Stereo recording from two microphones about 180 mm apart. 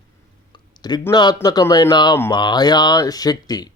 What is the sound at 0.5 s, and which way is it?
Speech, 25° left (ahead or behind).